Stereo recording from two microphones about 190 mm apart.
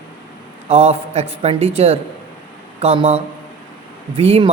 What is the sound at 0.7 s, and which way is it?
A man's voice, 35° right (ahead or behind).